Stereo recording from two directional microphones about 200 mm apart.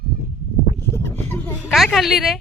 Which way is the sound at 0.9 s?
10° left (ahead or behind).